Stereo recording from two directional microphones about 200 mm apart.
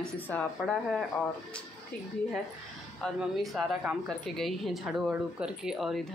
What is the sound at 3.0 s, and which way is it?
A woman's voice, centre (ahead or behind).